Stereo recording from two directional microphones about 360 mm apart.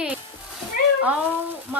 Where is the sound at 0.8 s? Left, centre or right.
Left.